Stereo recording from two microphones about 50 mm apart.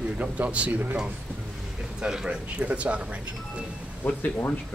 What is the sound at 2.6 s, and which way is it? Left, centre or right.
Speech, right.